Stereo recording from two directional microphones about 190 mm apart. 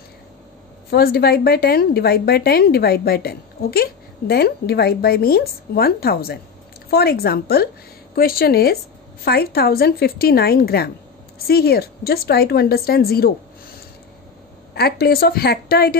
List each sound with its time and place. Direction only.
0.8 s a woman's voice: 55° left (ahead or behind)
14.7 s a woman's voice: 55° left (ahead or behind)